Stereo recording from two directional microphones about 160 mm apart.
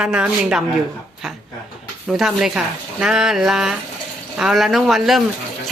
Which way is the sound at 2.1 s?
5° right (ahead or behind).